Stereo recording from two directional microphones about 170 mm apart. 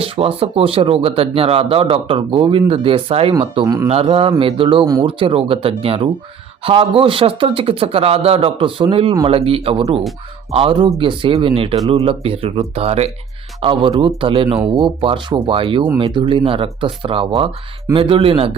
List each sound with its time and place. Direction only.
0.0 s speech: 35° right (ahead or behind)